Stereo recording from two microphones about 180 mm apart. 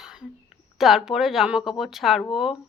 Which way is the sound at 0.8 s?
Centre (ahead or behind).